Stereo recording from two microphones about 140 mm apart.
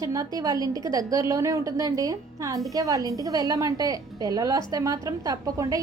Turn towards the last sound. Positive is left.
turn(degrees=-25)  # may be behind; listen again after turning